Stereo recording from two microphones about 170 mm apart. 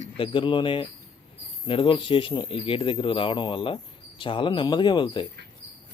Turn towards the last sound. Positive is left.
turn(degrees=30)  # may be behind; listen again after turning